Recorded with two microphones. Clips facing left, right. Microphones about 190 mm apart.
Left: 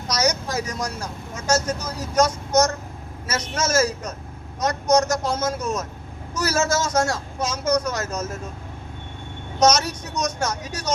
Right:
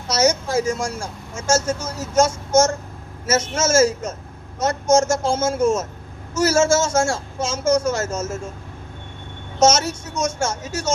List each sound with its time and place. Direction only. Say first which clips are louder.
0.1 s speech: right 5 dB; 25° right (ahead or behind)
9.6 s speech: right 2 dB; 25° right (ahead or behind)